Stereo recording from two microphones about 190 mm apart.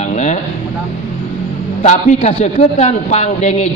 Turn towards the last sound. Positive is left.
turn(degrees=35)  # may be behind; listen again after turning